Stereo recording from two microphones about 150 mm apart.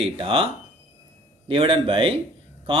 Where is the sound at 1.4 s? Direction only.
35° right (ahead or behind).